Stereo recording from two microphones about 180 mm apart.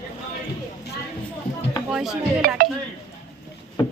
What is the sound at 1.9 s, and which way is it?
Speech, 5° right (ahead or behind).